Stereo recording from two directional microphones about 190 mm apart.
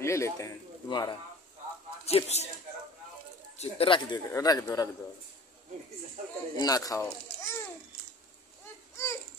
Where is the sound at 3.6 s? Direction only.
30° left (ahead or behind).